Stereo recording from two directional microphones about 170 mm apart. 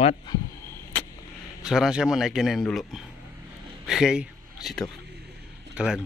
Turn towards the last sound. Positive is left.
turn(degrees=-5)  # may be behind; listen again after turning